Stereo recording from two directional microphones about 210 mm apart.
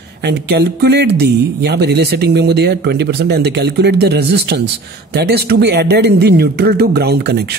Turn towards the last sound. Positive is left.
turn(degrees=-50)  # may be behind; listen again after turning